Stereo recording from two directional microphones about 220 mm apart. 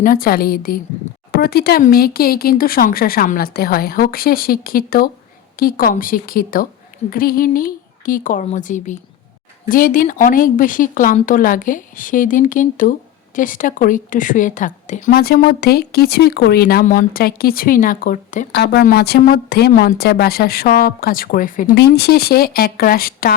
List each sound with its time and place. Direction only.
0.0 s speech: 40° left (ahead or behind)